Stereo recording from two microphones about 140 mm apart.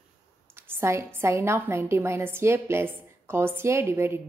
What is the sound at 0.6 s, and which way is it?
A woman's voice, 20° right (ahead or behind).